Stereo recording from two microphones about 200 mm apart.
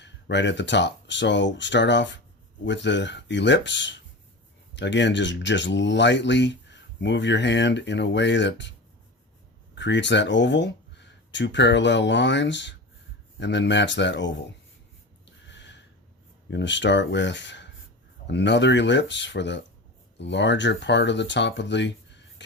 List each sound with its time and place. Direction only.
0.0 s speech: 60° left (ahead or behind)
9.7 s speech: 65° left (ahead or behind)
15.4 s a sound: 60° left (ahead or behind)
16.5 s speech: 60° left (ahead or behind)
22.4 s music: 65° left (ahead or behind)